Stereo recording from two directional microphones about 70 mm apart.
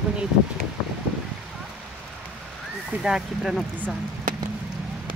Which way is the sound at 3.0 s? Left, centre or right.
Centre.